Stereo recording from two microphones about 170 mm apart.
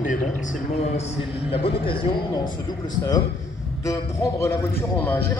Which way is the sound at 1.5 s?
35° left (ahead or behind).